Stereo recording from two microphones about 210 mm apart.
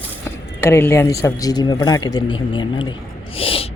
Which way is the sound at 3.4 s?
25° left (ahead or behind).